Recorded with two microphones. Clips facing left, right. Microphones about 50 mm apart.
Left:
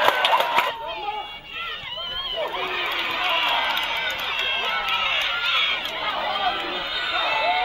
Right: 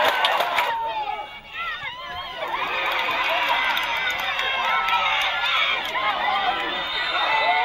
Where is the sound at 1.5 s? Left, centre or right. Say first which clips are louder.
Right 3 dB; right.